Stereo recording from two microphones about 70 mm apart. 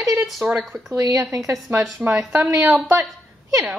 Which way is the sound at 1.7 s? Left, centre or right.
Right.